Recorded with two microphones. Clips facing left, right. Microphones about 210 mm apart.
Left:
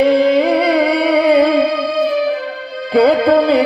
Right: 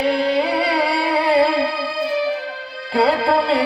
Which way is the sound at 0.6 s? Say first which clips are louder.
Left 7 dB; 55° left (ahead or behind).